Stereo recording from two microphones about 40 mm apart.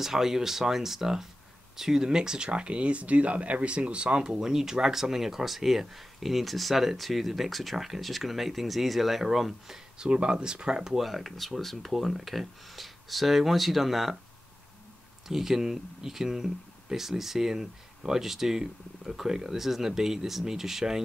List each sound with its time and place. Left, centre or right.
0.0 s speech: centre; by 4.4 s right
4.4 s speech: centre
9.9 s speech: right
11.0 s speech: centre
15.2 s speech: centre